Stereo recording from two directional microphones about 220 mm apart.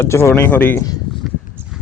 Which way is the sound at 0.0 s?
10° left (ahead or behind).